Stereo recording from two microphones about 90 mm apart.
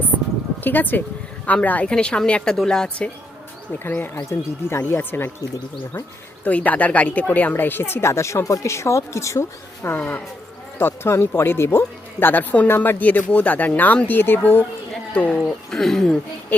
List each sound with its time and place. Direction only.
0.6 s speech: 20° left (ahead or behind)
3.8 s speech: 20° left (ahead or behind)
6.4 s speech: 15° left (ahead or behind)
10.0 s speech: 15° left (ahead or behind)
10.8 s speech: 30° left (ahead or behind); by 16.1 s 5° left (ahead or behind)